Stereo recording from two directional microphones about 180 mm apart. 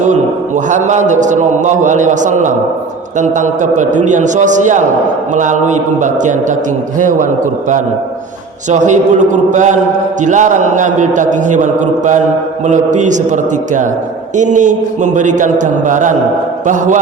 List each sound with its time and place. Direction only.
0.0 s a man's voice: 45° right (ahead or behind)
8.7 s a man's voice: 40° right (ahead or behind)